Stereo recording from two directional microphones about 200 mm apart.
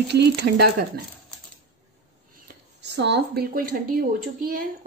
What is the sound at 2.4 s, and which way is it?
A woman's voice, 60° right (ahead or behind).